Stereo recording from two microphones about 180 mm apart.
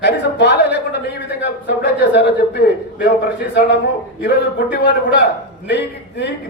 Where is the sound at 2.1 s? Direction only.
70° left (ahead or behind).